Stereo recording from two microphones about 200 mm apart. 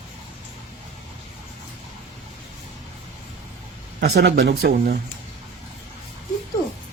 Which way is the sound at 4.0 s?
55° right (ahead or behind).